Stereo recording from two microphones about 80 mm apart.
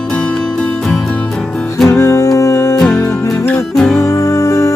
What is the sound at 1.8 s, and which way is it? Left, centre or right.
Music, left.